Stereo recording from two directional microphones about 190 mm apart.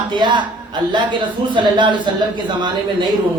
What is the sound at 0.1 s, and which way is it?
A man's voice, 25° right (ahead or behind).